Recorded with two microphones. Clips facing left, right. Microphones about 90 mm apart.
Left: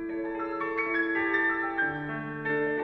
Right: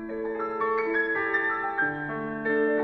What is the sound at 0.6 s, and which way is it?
Music, 15° right (ahead or behind).